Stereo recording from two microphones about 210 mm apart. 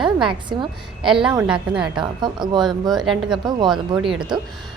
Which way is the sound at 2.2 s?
20° right (ahead or behind).